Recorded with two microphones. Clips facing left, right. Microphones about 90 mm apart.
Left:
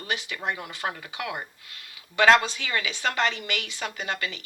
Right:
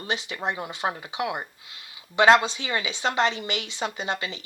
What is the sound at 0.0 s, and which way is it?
A woman's voice, 25° right (ahead or behind).